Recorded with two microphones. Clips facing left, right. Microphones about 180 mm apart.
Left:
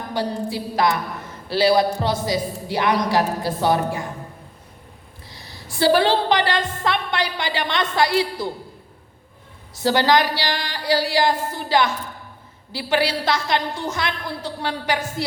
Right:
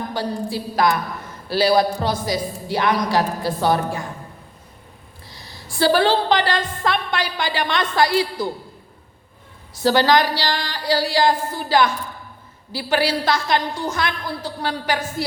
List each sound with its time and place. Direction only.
0.1 s a woman's voice: 20° left (ahead or behind)
5.3 s a woman's voice: 20° left (ahead or behind)
9.7 s a woman's voice: 20° left (ahead or behind)